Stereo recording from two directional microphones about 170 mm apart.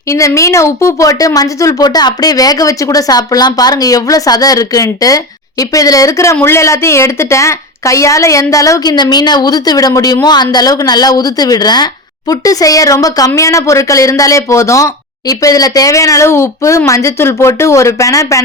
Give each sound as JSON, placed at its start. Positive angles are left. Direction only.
{"t": 0.1, "sound": "speech", "side_deg": 15}